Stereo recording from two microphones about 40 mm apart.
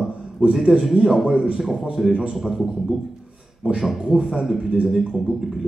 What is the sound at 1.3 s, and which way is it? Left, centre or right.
Speech, right.